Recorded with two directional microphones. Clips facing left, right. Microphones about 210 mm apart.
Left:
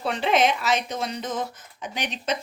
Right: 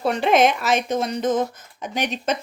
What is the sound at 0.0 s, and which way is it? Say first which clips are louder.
Speech: right 4 dB; 45° right (ahead or behind).